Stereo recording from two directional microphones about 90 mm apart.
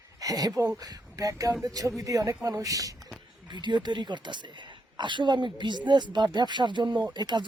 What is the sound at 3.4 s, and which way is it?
A woman's voice, 55° right (ahead or behind).